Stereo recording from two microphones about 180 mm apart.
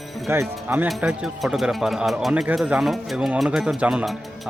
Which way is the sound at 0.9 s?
Centre (ahead or behind).